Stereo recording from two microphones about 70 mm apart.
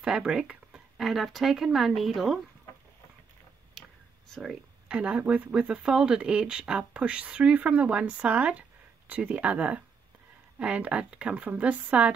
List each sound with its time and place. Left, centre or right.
0.0 s speech: centre
0.9 s speech: centre
4.3 s speech: centre
4.8 s speech: centre